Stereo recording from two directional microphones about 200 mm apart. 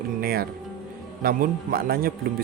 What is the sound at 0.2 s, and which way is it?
A man's voice, 50° right (ahead or behind).